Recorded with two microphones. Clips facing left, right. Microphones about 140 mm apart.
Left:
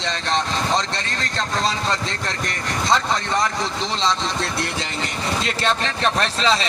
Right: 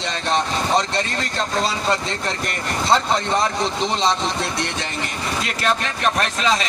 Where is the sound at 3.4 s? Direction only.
15° right (ahead or behind).